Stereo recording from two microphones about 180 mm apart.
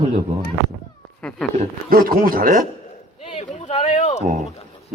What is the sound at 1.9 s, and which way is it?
Speech, 55° right (ahead or behind).